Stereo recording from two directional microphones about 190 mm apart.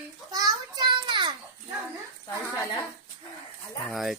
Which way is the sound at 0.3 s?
20° right (ahead or behind).